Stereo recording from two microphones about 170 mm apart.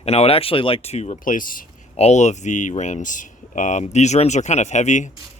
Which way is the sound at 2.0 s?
40° left (ahead or behind).